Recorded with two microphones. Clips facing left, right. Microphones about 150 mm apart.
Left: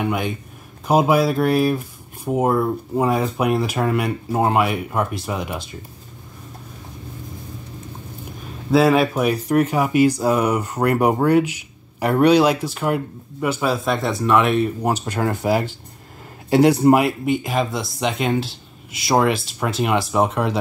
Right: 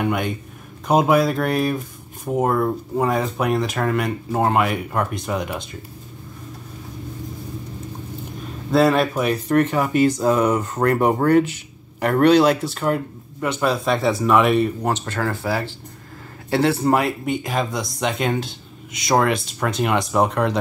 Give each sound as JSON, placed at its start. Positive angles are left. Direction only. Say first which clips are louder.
{"t": 0.0, "sound": "speech", "louder": "even", "side_deg": 0}
{"t": 8.7, "sound": "speech", "louder": "left 1 dB", "side_deg": 5}
{"t": 14.8, "sound": "speech", "louder": "left 2 dB", "side_deg": 10}